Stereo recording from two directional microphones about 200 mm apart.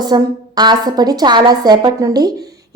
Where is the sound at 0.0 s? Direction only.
20° right (ahead or behind).